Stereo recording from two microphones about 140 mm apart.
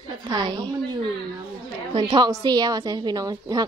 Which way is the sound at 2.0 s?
25° right (ahead or behind).